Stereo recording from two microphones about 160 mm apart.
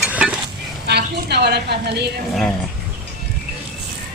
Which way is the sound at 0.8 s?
90° right.